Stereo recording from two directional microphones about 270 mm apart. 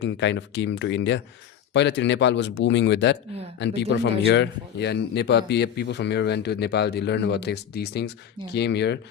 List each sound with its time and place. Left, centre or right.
0.0 s a man's voice: left